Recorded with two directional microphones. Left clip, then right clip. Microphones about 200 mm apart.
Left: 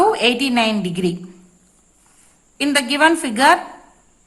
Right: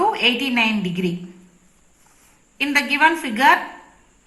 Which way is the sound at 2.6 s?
55° left (ahead or behind).